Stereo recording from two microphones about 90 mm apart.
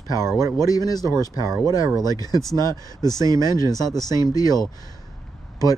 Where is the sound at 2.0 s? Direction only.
45° left (ahead or behind).